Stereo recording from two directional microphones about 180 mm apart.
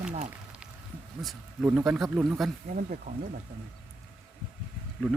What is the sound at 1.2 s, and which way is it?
A man's voice, 5° right (ahead or behind).